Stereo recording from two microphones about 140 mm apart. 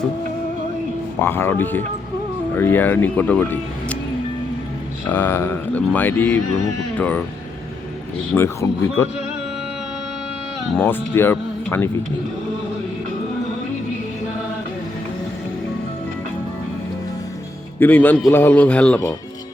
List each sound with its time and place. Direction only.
1.2 s speech: 15° left (ahead or behind)
5.1 s speech: 15° left (ahead or behind)
8.4 s speech: 15° left (ahead or behind)
10.8 s speech: 15° left (ahead or behind)
17.7 s speech: 15° left (ahead or behind)